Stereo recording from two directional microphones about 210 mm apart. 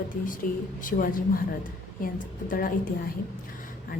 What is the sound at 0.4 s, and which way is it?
A woman's voice, 40° left (ahead or behind).